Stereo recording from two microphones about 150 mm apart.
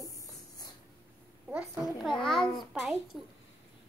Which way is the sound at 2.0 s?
5° left (ahead or behind).